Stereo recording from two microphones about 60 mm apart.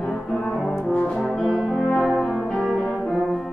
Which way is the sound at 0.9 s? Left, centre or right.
Left.